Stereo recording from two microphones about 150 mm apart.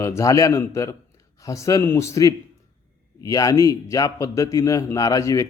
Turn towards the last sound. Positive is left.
turn(degrees=20)  # may be behind; listen again after turning